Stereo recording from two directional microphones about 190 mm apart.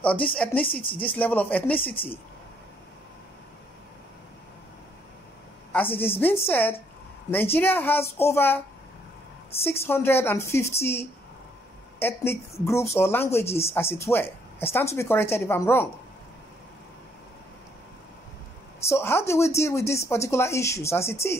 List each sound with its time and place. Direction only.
0.0 s speech: 5° left (ahead or behind)
5.9 s speech: 10° left (ahead or behind)
18.8 s speech: 15° left (ahead or behind)